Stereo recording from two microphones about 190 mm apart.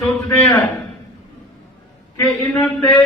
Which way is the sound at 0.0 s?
5° left (ahead or behind).